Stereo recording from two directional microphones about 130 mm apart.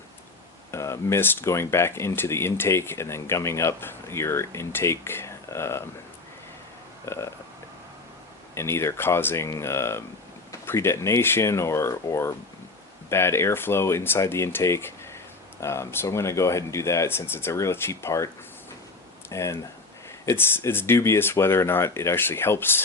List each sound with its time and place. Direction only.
0.7 s speech: 20° left (ahead or behind)
7.0 s burping: 20° left (ahead or behind)
8.5 s speech: 20° left (ahead or behind)
19.3 s speech: 20° left (ahead or behind)